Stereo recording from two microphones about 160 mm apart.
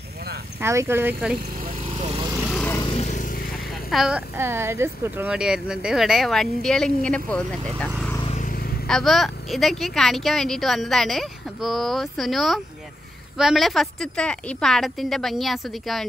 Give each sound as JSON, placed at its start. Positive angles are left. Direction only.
{"t": 0.6, "sound": "speech", "side_deg": -15}
{"t": 1.8, "sound": "lawn mower", "side_deg": -40}
{"t": 3.0, "sound": "vehicle", "side_deg": 50}
{"t": 3.9, "sound": "speech", "side_deg": 0}
{"t": 4.4, "sound": "speech", "side_deg": -15}
{"t": 8.3, "sound": "vehicle", "side_deg": 55}
{"t": 8.8, "sound": "speech", "side_deg": 0}